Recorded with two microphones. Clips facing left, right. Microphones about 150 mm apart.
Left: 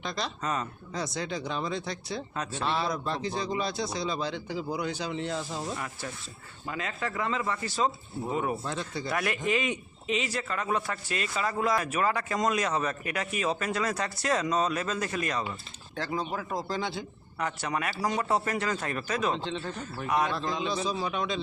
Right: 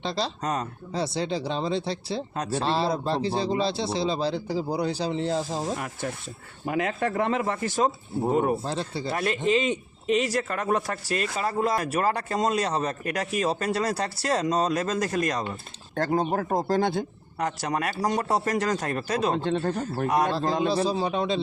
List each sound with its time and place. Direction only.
0.0 s speech: 30° right (ahead or behind)
6.7 s speech: 65° right (ahead or behind)
8.6 s speech: 30° right (ahead or behind)
10.1 s speech: 45° right (ahead or behind)
11.3 s speech: 35° right (ahead or behind); by 20.7 s 55° right (ahead or behind)
20.8 s speech: 30° right (ahead or behind)